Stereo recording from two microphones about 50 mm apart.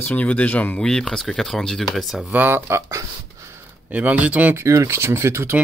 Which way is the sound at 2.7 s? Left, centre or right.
Right.